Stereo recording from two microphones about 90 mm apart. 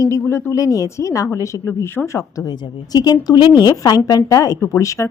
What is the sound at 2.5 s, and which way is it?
A woman's voice, 55° left (ahead or behind).